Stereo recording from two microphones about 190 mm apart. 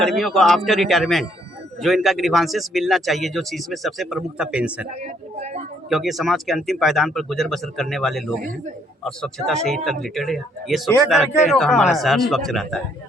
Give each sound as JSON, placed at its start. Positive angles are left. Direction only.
{"t": 0.0, "sound": "speech", "side_deg": 0}
{"t": 5.0, "sound": "a sound", "side_deg": -35}
{"t": 5.9, "sound": "speech", "side_deg": 0}
{"t": 8.4, "sound": "a man's voice", "side_deg": -45}
{"t": 9.6, "sound": "speech", "side_deg": 0}